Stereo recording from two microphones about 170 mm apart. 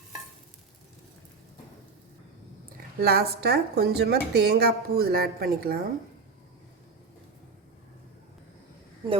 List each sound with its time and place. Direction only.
3.0 s a woman's voice: 65° right (ahead or behind)